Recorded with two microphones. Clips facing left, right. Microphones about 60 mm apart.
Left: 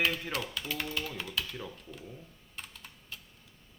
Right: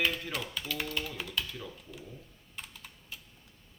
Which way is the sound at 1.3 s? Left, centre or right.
Centre.